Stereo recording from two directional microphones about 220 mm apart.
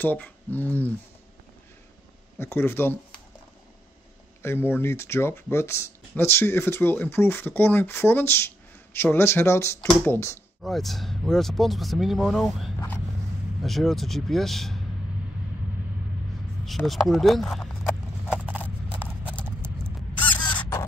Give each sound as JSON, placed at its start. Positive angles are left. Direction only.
{"t": 0.0, "sound": "speech", "side_deg": 10}
{"t": 2.3, "sound": "speech", "side_deg": 10}
{"t": 4.4, "sound": "speech", "side_deg": 10}
{"t": 16.6, "sound": "speech", "side_deg": 0}
{"t": 18.3, "sound": "horse", "side_deg": -5}
{"t": 20.2, "sound": "a sound", "side_deg": 20}